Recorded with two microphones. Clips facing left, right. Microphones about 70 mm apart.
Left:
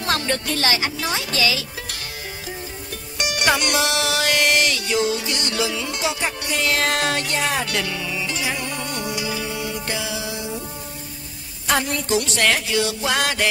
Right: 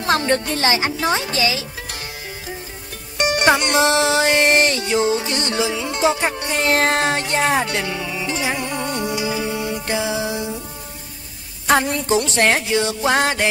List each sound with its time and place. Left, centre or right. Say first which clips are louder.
0.0 s speech: right 5 dB; right
3.2 s music: right 5 dB; right
11.6 s speech: right 5 dB; right